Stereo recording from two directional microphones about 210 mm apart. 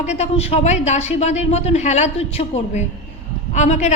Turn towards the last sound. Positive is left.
turn(degrees=35)  # may be behind; listen again after turning